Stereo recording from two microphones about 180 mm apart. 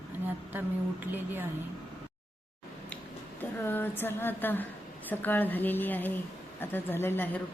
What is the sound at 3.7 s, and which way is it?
A woman's voice, 10° left (ahead or behind).